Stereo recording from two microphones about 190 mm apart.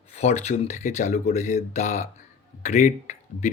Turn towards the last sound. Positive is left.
turn(degrees=40)  # may be behind; listen again after turning